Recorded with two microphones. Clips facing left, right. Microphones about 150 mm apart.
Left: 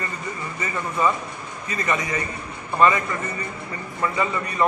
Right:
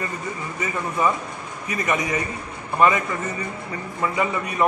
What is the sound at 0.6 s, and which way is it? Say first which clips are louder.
A man's voice: right 1 dB; 15° right (ahead or behind).